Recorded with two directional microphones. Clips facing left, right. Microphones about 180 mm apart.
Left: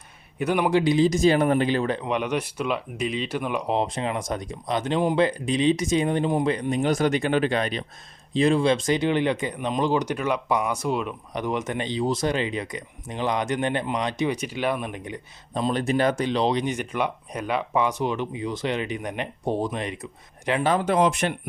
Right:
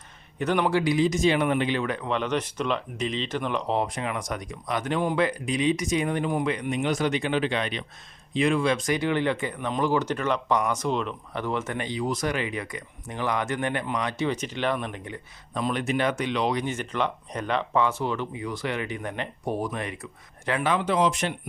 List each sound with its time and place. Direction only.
0.3 s speech: 10° left (ahead or behind)
0.8 s speech: 25° left (ahead or behind)
2.0 s speech: 15° left (ahead or behind)
3.8 s speech: 25° left (ahead or behind)
15.5 s speech: 30° left (ahead or behind)
20.7 s speech: 45° left (ahead or behind)